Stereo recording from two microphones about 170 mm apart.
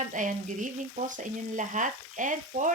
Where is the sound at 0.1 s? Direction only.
50° right (ahead or behind).